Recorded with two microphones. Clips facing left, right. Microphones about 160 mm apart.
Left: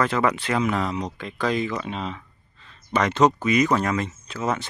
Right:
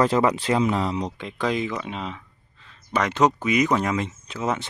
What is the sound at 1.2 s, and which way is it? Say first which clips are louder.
Speech: left 2 dB; 15° right (ahead or behind).